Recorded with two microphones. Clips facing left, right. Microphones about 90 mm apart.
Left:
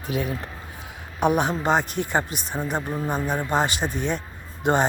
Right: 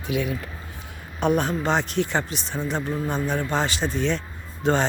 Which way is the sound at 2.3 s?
50° left (ahead or behind).